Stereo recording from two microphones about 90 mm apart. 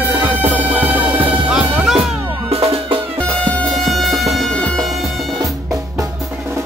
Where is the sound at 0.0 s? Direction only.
20° right (ahead or behind).